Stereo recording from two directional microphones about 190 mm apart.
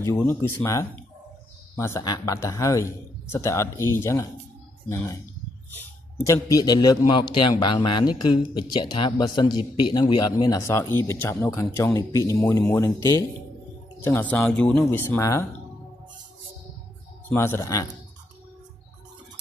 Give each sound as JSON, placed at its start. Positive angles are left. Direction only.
{"t": 0.0, "sound": "a man's voice", "side_deg": 15}
{"t": 17.3, "sound": "a man's voice", "side_deg": 15}